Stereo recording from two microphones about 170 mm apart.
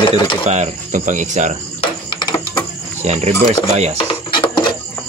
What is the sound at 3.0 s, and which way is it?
Speech, 40° right (ahead or behind).